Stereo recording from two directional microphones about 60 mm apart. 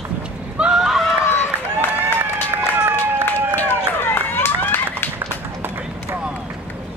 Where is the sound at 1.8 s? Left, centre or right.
Left.